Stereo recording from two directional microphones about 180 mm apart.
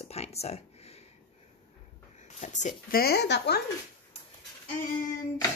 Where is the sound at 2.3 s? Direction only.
40° left (ahead or behind); by 3.6 s 70° left (ahead or behind).